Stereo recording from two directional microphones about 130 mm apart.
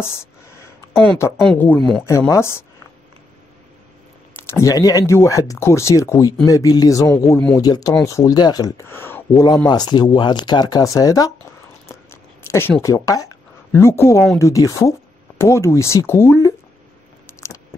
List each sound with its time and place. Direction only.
0.0 s speech: 20° left (ahead or behind)
2.0 s speech: 20° left (ahead or behind)
4.4 s speech: 20° left (ahead or behind)
9.7 s speech: 35° left (ahead or behind)
11.9 s a sound: 20° left (ahead or behind)
12.8 s speech: 25° left (ahead or behind)
17.4 s a sound: 25° left (ahead or behind)